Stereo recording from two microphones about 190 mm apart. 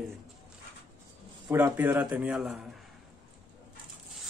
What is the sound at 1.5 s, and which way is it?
A man's voice, 15° right (ahead or behind).